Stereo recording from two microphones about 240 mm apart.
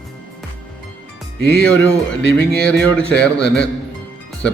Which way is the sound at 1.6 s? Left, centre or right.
Centre.